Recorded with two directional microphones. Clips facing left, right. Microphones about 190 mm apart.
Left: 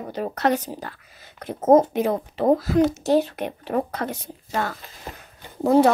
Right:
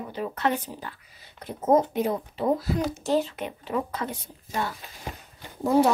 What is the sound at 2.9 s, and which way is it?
Speech, 65° left (ahead or behind).